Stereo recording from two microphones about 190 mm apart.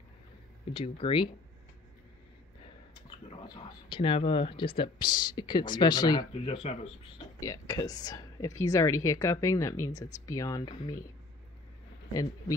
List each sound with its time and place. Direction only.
0.7 s speech: 30° left (ahead or behind)
3.1 s speech: 25° left (ahead or behind)
7.3 s speech: 20° left (ahead or behind)
12.1 s speech: 20° left (ahead or behind)